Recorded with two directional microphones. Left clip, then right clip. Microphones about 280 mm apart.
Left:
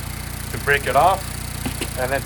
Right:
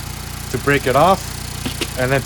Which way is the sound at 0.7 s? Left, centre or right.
Right.